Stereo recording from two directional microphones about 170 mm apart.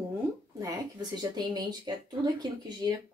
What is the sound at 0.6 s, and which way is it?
Speech, 20° right (ahead or behind).